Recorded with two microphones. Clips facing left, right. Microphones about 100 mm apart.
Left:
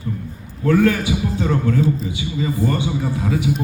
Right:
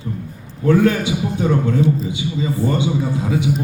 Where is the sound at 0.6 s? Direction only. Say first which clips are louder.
Right 1 dB; 20° right (ahead or behind).